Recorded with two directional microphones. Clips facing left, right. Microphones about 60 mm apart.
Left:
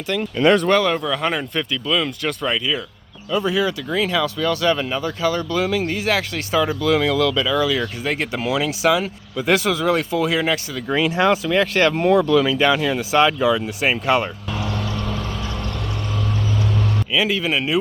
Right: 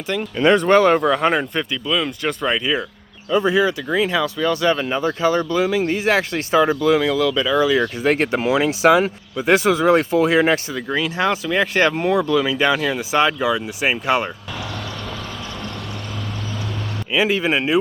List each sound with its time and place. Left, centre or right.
0.3 s speech: centre
0.8 s speech: right
8.0 s speech: right
8.4 s speech: right
9.3 s speech: right
10.8 s speech: centre
11.5 s speech: centre
17.1 s speech: right